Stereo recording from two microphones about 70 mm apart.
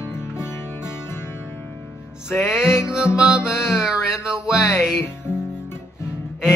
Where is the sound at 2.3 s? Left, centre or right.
Centre.